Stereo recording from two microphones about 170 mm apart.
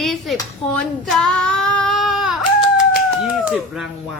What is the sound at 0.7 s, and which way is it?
Child singing, centre (ahead or behind).